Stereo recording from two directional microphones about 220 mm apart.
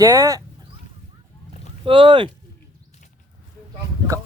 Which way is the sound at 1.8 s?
25° right (ahead or behind).